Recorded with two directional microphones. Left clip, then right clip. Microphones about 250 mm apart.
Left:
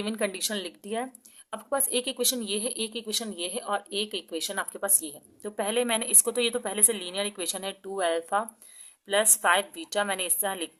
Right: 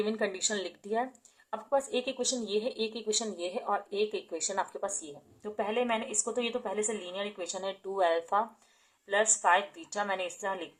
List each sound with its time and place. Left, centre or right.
0.0 s a woman's voice: left